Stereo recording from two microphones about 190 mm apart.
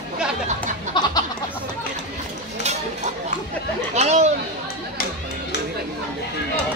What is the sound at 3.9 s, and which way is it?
Chatter, 35° right (ahead or behind).